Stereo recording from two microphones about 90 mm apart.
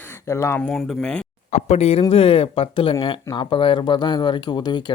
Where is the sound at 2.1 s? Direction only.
90° left.